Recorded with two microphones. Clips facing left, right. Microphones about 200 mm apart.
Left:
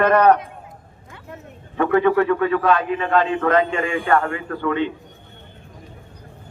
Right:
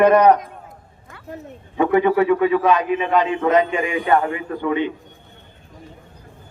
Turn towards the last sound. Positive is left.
turn(degrees=-15)  # may be behind; listen again after turning